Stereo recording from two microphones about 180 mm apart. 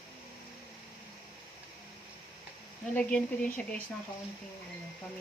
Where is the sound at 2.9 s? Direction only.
5° left (ahead or behind).